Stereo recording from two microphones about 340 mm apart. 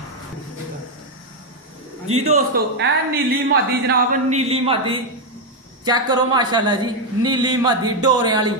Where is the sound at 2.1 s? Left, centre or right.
Centre.